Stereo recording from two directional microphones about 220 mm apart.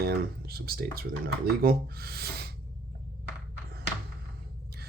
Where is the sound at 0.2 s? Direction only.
45° right (ahead or behind).